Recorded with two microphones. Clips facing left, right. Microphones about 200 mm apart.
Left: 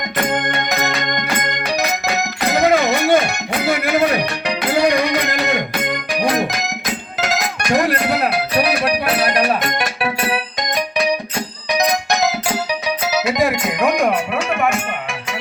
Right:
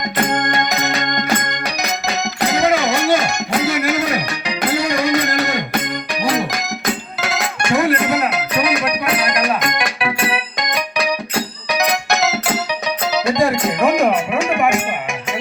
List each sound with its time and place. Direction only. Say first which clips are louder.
1.9 s music: left 1 dB; 60° left (ahead or behind)
7.3 s music: even; 35° left (ahead or behind)
11.8 s music: left 1 dB; 15° left (ahead or behind); by 14.8 s 10° right (ahead or behind)